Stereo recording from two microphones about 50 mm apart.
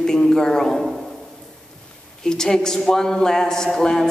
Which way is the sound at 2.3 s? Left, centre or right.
Centre.